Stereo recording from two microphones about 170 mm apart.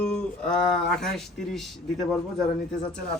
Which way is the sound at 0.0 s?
5° left (ahead or behind).